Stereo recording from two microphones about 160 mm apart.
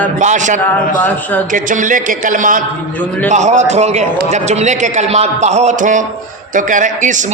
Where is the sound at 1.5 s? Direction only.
55° right (ahead or behind).